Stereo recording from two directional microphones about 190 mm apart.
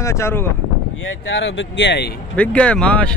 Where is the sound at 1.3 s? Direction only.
75° left (ahead or behind).